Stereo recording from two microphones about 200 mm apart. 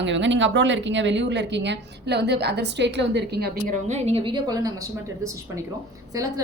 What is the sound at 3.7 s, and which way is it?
A woman's voice, 35° right (ahead or behind).